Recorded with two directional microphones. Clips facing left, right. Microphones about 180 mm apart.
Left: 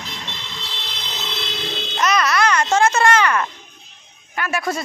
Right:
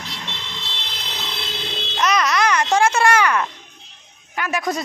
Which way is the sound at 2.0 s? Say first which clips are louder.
Even; 15° right (ahead or behind).